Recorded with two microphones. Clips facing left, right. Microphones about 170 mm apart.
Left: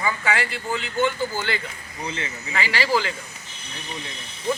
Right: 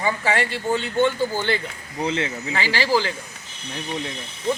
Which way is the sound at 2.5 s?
25° right (ahead or behind).